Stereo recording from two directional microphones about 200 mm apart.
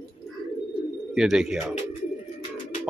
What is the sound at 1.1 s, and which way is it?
Speech, 5° right (ahead or behind).